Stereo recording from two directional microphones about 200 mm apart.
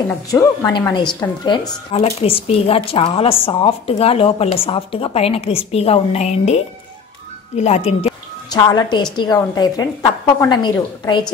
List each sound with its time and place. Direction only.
0.3 s speech: 15° left (ahead or behind)
8.5 s speech: 20° left (ahead or behind)